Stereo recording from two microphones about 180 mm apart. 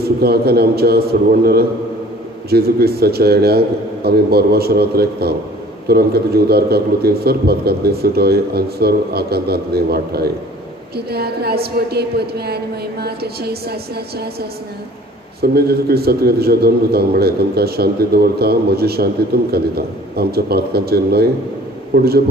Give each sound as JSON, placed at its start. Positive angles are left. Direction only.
{"t": 0.0, "sound": "a man's voice", "side_deg": -60}
{"t": 15.4, "sound": "a man's voice", "side_deg": -60}